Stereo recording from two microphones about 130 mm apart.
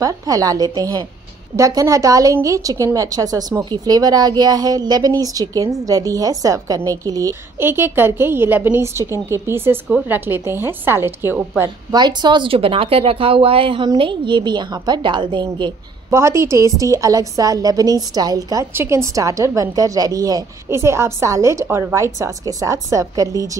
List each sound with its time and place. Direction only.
0.0 s a woman's voice: 25° right (ahead or behind)
11.9 s a woman's voice: 35° right (ahead or behind)
16.1 s a woman's voice: 20° right (ahead or behind)